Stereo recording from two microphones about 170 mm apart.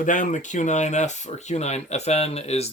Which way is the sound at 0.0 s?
50° left (ahead or behind).